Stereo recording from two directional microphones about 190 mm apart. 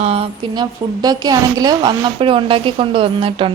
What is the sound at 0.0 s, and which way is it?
A woman's voice, 30° right (ahead or behind).